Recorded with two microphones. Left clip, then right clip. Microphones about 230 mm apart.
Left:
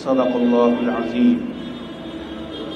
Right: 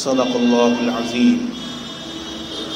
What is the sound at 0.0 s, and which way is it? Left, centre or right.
Speech, right.